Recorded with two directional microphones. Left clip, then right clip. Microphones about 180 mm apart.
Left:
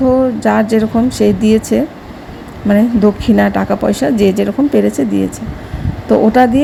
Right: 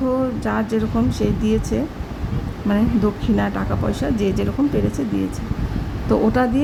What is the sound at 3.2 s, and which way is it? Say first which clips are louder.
A woman's voice: left 9 dB; 25° left (ahead or behind).